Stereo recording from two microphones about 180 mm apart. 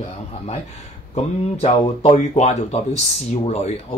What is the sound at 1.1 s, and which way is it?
Speech, 35° left (ahead or behind).